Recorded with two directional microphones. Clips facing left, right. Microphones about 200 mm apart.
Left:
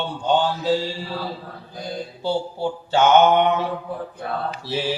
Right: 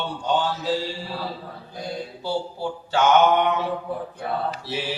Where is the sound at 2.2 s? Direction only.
25° left (ahead or behind).